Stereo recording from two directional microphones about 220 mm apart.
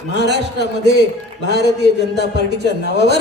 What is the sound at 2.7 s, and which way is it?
Speech, 50° right (ahead or behind).